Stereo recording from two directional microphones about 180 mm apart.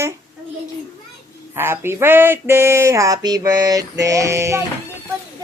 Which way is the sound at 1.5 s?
15° right (ahead or behind).